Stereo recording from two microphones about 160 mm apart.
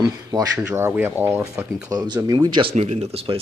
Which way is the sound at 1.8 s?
25° right (ahead or behind).